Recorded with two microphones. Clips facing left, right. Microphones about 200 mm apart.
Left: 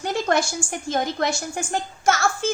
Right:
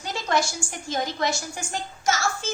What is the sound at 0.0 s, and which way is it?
A woman's voice, 55° left (ahead or behind).